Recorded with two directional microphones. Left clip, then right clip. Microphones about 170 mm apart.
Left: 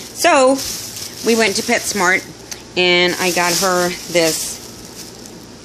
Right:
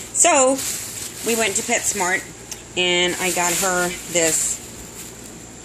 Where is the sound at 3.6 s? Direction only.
30° left (ahead or behind).